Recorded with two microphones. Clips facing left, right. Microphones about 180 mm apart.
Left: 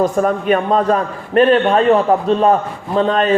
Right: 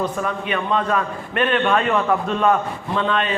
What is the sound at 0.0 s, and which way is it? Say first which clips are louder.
A man's voice: left 8 dB; 45° left (ahead or behind).